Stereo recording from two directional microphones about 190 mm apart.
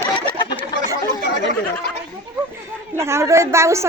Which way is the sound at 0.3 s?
25° left (ahead or behind).